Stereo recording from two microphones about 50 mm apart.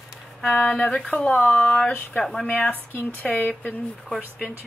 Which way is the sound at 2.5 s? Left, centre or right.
Left.